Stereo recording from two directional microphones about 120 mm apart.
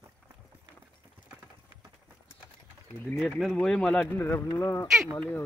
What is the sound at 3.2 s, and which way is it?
Speech, centre (ahead or behind).